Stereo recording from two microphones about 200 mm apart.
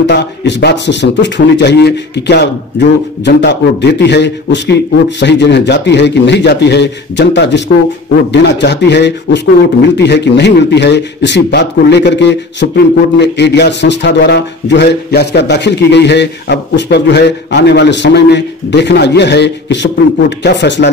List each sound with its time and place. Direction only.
0.0 s a man's voice: 60° left (ahead or behind)